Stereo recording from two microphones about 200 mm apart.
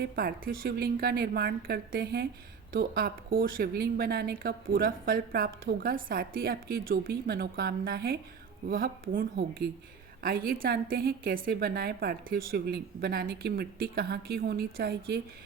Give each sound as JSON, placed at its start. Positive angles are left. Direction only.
{"t": 0.0, "sound": "a woman's voice", "side_deg": -50}